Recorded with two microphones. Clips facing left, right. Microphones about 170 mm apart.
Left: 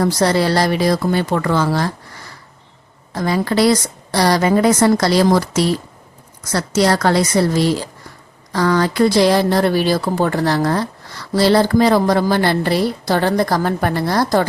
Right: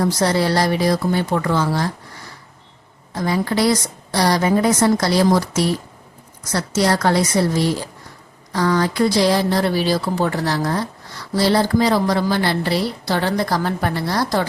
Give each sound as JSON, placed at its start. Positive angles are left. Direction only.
{"t": 0.0, "sound": "a woman's voice", "side_deg": 75}
{"t": 3.2, "sound": "a woman's voice", "side_deg": 80}
{"t": 8.5, "sound": "speech", "side_deg": 75}
{"t": 11.3, "sound": "a woman's voice", "side_deg": 75}